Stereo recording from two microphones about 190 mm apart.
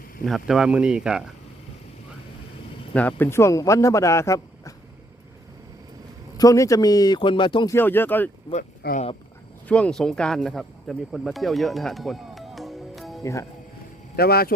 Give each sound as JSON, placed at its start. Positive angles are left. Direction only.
{"t": 0.3, "sound": "speech", "side_deg": 0}
{"t": 2.9, "sound": "a man's voice", "side_deg": 10}
{"t": 6.3, "sound": "speech", "side_deg": 20}
{"t": 7.8, "sound": "a man's voice", "side_deg": 10}
{"t": 8.8, "sound": "speech", "side_deg": 55}
{"t": 9.6, "sound": "speech", "side_deg": 5}
{"t": 14.2, "sound": "speech", "side_deg": 55}